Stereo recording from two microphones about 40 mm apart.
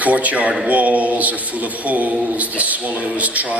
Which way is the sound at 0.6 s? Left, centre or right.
Right.